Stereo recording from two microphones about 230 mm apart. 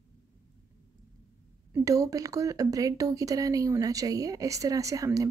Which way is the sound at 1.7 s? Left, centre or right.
Centre.